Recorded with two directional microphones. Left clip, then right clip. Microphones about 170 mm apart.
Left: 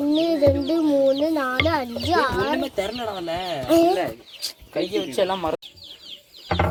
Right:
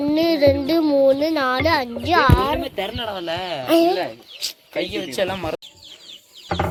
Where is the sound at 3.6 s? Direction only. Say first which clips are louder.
Right 1 dB; centre (ahead or behind).